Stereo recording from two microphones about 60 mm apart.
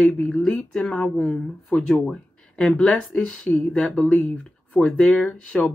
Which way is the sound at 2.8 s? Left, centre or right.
Centre.